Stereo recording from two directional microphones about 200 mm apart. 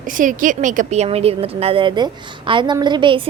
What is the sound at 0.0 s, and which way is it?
Speech, 40° right (ahead or behind).